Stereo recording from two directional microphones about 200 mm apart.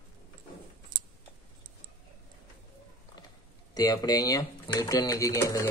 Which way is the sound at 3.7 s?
20° left (ahead or behind).